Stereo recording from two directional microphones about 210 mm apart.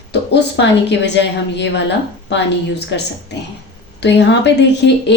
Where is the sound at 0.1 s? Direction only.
55° left (ahead or behind).